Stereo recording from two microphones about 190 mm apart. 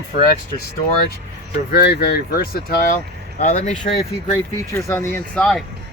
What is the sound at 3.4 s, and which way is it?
Speech, 40° left (ahead or behind).